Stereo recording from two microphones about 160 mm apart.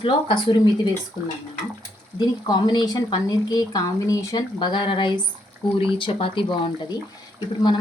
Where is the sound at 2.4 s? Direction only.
25° left (ahead or behind).